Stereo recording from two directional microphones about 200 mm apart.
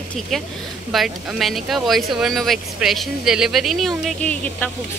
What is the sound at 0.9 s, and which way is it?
Speech, centre (ahead or behind).